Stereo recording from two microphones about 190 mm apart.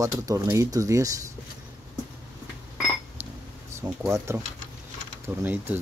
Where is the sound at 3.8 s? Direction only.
10° right (ahead or behind).